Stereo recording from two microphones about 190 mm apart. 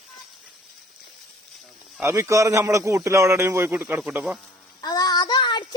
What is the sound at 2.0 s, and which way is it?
A man's voice, 15° right (ahead or behind).